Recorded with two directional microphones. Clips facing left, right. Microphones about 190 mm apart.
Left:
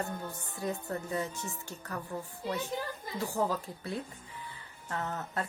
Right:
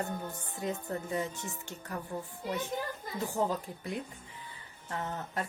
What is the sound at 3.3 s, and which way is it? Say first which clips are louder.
Speech: even; 20° right (ahead or behind).